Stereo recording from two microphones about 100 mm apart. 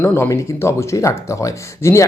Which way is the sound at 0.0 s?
25° left (ahead or behind).